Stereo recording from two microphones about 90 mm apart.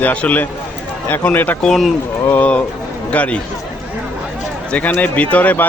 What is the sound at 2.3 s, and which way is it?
A man's voice, 15° left (ahead or behind).